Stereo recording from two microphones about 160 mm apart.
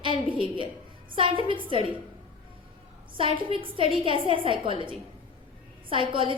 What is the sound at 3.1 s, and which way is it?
A woman's voice, 35° right (ahead or behind).